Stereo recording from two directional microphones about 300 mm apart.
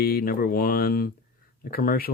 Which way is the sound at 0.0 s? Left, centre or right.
Left.